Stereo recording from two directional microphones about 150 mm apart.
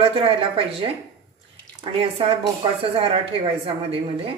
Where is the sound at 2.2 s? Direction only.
40° right (ahead or behind).